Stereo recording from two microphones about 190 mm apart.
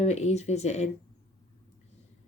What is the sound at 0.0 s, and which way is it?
Speech, 35° left (ahead or behind).